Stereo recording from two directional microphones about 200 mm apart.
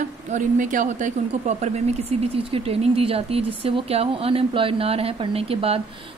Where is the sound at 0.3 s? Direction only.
40° right (ahead or behind).